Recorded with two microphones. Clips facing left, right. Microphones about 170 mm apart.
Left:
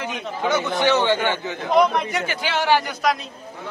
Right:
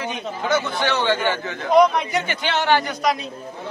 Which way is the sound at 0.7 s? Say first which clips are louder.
Left 2 dB; 15° left (ahead or behind).